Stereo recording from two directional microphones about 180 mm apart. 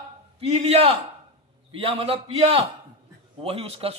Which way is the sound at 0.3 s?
35° right (ahead or behind).